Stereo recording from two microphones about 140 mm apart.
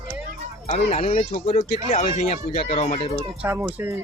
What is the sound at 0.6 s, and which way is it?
Speech, 55° left (ahead or behind).